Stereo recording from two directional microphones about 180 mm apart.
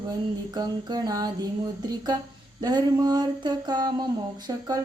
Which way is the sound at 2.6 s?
20° right (ahead or behind).